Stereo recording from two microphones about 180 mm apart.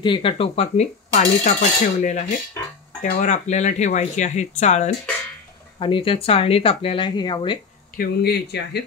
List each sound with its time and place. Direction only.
0.0 s speech: 30° left (ahead or behind)
5.8 s speech: 30° left (ahead or behind)
8.0 s speech: 60° left (ahead or behind)